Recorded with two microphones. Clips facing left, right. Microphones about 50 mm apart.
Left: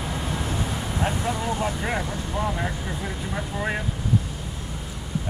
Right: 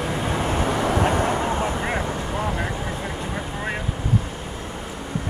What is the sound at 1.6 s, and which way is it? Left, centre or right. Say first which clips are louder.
Vehicle: right 3 dB; right.